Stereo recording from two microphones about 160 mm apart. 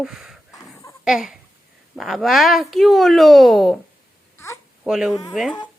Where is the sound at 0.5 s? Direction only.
20° left (ahead or behind).